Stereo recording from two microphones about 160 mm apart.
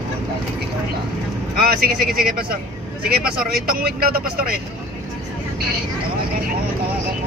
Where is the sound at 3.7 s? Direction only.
65° right (ahead or behind).